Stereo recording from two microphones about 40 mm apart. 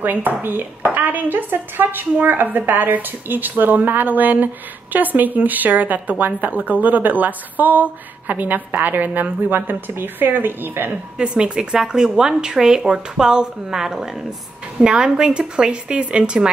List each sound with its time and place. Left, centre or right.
0.0 s speech: right
0.8 s speech: right
11.1 s speech: right